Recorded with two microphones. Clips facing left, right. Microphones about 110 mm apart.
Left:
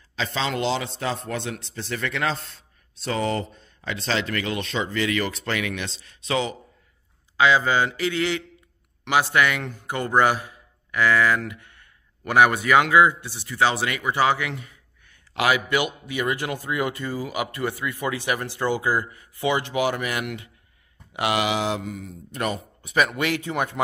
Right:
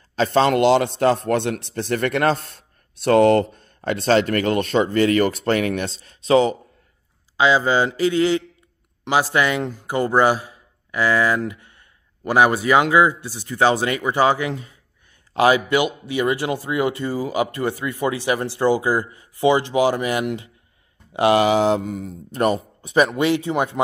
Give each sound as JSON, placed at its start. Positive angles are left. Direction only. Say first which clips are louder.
{"t": 0.1, "sound": "a man's voice", "louder": "right 10 dB", "side_deg": -50}
{"t": 7.3, "sound": "speech", "louder": "right 2 dB", "side_deg": -25}
{"t": 13.2, "sound": "a man's voice", "louder": "right 4 dB", "side_deg": -40}
{"t": 15.7, "sound": "speech", "louder": "right 5 dB", "side_deg": -25}